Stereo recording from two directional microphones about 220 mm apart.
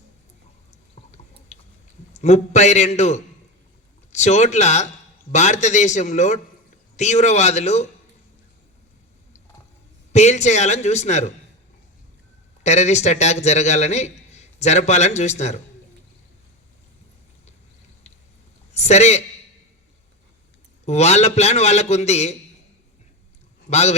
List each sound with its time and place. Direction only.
1.5 s chewing: 30° left (ahead or behind)
2.1 s a man's voice: 30° left (ahead or behind)
10.1 s a man's voice: 30° left (ahead or behind)
12.6 s a man's voice: 30° left (ahead or behind)
18.7 s a man's voice: 30° left (ahead or behind)
20.8 s a man's voice: 30° left (ahead or behind)
23.6 s speech: 30° left (ahead or behind)